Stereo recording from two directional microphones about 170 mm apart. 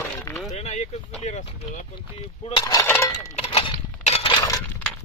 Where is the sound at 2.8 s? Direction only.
10° left (ahead or behind).